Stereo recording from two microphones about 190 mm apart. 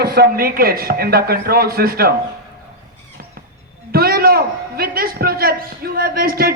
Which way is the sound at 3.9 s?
50° right (ahead or behind).